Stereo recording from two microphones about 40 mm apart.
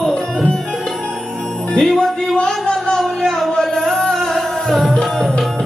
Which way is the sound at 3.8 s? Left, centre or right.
Centre.